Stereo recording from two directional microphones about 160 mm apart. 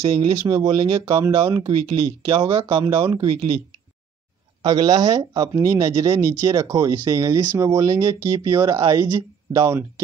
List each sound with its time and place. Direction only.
0.0 s speech: 35° right (ahead or behind)
0.4 s speech: 20° right (ahead or behind)
4.6 s speech: 25° right (ahead or behind)